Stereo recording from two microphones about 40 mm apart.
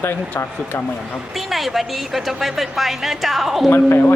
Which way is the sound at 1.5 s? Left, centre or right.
Centre.